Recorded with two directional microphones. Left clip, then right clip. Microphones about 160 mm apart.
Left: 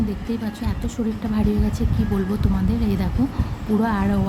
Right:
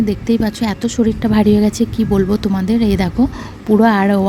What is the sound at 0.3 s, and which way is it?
Speech, 55° right (ahead or behind).